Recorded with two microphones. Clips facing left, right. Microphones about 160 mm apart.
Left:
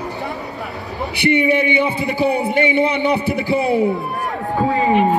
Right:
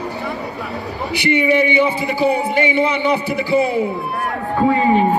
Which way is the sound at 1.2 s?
60° left (ahead or behind).